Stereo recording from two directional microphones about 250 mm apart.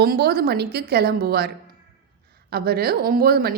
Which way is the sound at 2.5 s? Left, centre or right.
Right.